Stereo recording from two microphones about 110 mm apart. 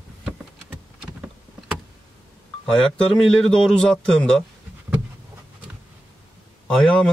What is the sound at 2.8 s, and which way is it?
Speech, 5° left (ahead or behind).